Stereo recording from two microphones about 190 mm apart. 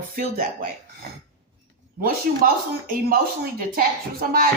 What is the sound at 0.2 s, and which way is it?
Speech, 50° right (ahead or behind).